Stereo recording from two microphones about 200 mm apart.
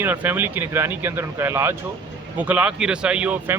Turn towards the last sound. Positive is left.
turn(degrees=-5)  # may be behind; listen again after turning